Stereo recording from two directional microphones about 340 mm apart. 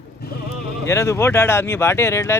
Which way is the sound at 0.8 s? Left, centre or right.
Centre.